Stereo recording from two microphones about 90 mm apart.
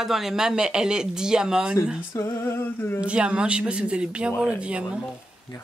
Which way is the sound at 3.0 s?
10° right (ahead or behind).